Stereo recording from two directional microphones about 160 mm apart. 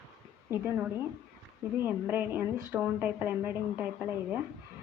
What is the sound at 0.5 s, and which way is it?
Speech, 15° right (ahead or behind).